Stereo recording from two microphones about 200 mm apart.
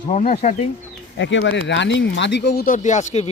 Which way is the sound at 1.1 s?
65° left (ahead or behind).